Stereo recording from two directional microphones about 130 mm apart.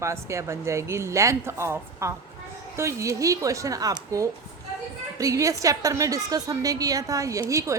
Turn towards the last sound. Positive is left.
turn(degrees=-25)  # may be behind; listen again after turning